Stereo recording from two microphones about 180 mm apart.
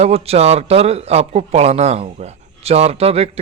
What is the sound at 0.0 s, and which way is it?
Speech, 35° right (ahead or behind).